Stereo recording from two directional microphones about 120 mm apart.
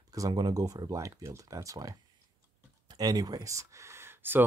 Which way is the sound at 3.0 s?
30° right (ahead or behind).